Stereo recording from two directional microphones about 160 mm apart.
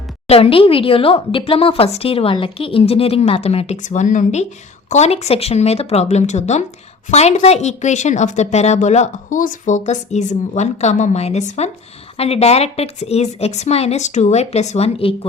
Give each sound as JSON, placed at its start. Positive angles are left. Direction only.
{"t": 0.3, "sound": "a woman's voice", "side_deg": 35}